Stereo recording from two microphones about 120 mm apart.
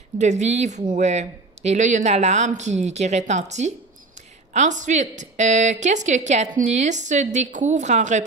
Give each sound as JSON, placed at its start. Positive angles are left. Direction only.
{"t": 0.2, "sound": "speech", "side_deg": -75}
{"t": 4.6, "sound": "a woman's voice", "side_deg": -85}